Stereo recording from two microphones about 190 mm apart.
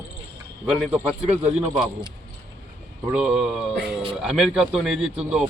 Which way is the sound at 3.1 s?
5° right (ahead or behind).